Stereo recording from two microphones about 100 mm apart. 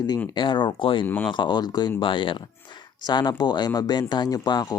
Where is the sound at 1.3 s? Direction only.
50° left (ahead or behind).